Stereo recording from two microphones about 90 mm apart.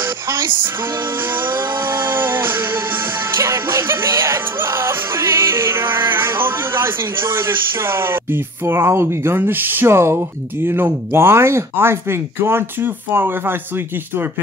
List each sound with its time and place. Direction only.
0.0 s music: 25° right (ahead or behind)
10.6 s speech: 25° right (ahead or behind)